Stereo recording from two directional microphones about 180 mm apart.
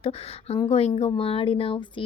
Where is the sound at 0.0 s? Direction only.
30° left (ahead or behind).